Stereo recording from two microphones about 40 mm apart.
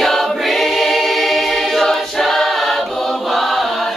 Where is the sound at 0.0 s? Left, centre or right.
Centre.